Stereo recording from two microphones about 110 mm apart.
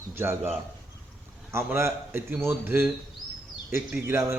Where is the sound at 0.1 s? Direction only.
20° right (ahead or behind).